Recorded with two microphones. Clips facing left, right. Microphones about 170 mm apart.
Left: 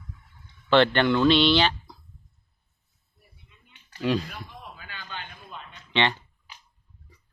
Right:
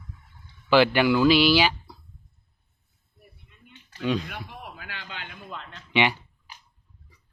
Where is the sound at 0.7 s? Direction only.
5° right (ahead or behind).